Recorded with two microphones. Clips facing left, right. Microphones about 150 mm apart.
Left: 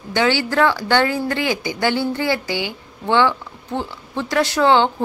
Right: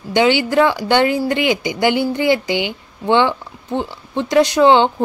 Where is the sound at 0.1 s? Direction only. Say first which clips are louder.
Right 4 dB; 15° right (ahead or behind).